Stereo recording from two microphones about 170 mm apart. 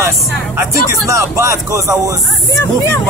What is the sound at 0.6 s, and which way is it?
Speech, 15° right (ahead or behind).